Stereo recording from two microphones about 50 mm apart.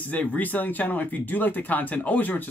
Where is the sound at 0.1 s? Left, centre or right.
Left.